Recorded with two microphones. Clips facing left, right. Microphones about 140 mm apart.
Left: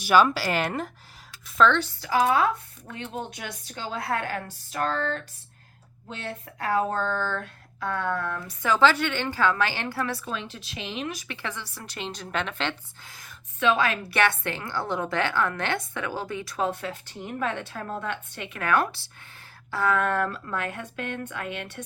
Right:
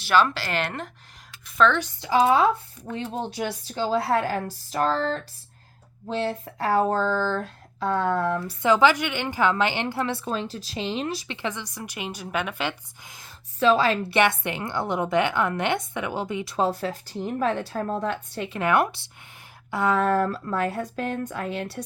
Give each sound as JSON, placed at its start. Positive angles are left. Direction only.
{"t": 0.0, "sound": "a woman's voice", "side_deg": 10}
{"t": 1.8, "sound": "a woman's voice", "side_deg": -20}
{"t": 10.2, "sound": "speech", "side_deg": -35}
{"t": 13.6, "sound": "a woman's voice", "side_deg": -35}
{"t": 14.2, "sound": "speech", "side_deg": -20}
{"t": 16.6, "sound": "a woman's voice", "side_deg": -35}
{"t": 18.6, "sound": "speech", "side_deg": -20}
{"t": 20.0, "sound": "a woman's voice", "side_deg": -35}